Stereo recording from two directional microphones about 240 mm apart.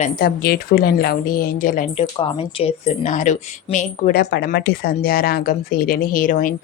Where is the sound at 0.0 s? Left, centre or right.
Left.